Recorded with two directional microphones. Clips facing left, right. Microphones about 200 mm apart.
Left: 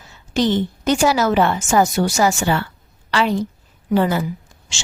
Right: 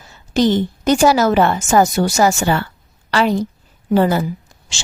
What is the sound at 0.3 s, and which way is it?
A woman's voice, 40° right (ahead or behind).